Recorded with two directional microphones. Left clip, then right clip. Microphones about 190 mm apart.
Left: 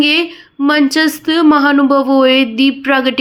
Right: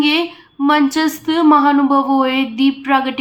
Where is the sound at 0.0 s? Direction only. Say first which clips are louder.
Left 3 dB; 25° left (ahead or behind).